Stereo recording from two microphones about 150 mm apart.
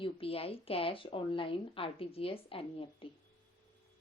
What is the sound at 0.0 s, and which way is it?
Speech, 40° left (ahead or behind).